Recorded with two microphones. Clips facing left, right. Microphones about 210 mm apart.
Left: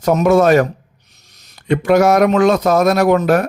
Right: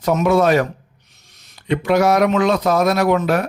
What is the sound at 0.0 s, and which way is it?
Speech, 40° left (ahead or behind).